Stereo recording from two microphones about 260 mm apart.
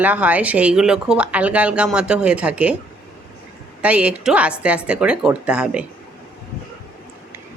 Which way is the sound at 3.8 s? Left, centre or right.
Centre.